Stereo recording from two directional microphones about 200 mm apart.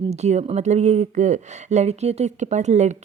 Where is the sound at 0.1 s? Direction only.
35° right (ahead or behind).